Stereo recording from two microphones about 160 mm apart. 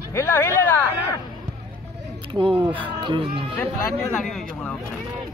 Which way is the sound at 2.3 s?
35° right (ahead or behind).